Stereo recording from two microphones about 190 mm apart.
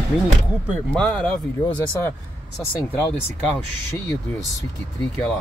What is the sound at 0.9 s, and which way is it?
Speech, 5° left (ahead or behind).